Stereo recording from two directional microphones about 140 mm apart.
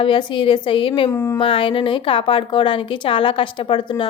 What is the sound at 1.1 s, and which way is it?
Speech, 20° left (ahead or behind).